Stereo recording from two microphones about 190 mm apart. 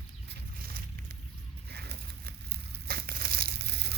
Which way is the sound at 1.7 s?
60° right (ahead or behind).